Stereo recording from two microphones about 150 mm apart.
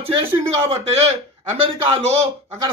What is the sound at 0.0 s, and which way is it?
Speech, 40° right (ahead or behind).